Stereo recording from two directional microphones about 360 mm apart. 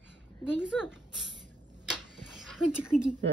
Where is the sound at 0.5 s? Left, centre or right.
Centre.